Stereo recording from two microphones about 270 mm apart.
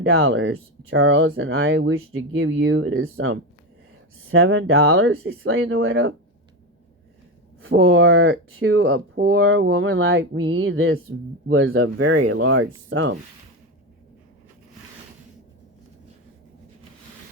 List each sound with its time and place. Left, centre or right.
0.0 s speech: right
7.6 s speech: right